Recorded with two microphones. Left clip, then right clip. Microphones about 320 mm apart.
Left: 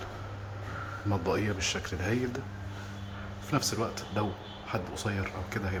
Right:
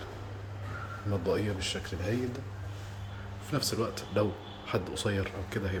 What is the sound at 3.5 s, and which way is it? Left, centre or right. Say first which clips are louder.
Speech: left 1 dB; centre.